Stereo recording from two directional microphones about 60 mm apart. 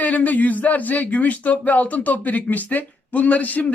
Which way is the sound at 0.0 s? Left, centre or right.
Left.